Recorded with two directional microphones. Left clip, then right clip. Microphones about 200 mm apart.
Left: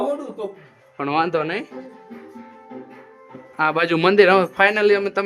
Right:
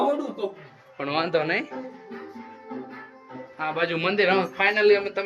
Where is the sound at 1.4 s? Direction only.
20° left (ahead or behind).